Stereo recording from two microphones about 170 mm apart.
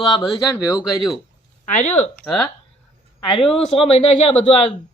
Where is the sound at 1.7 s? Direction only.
40° left (ahead or behind).